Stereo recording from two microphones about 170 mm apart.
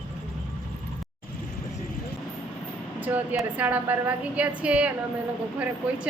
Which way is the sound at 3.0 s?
10° right (ahead or behind).